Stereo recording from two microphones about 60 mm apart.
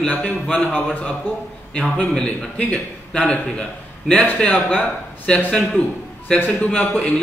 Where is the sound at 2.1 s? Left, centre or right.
Centre.